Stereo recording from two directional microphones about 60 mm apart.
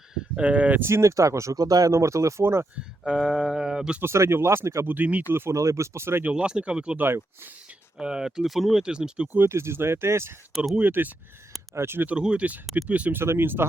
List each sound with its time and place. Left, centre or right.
0.3 s speech: right
0.8 s speech: right
1.9 s speech: right
2.4 s speech: right
3.0 s speech: centre
4.0 s speech: right
4.9 s speech: right
5.5 s speech: right
6.3 s speech: centre
9.5 s speech: right
10.8 s speech: right
11.7 s speech: right
12.0 s speech: centre
13.1 s speech: right